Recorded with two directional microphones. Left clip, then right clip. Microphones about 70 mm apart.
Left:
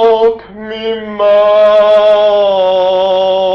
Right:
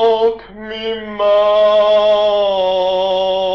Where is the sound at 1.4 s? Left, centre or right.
Right.